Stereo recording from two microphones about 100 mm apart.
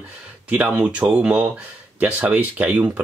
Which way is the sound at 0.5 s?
15° right (ahead or behind).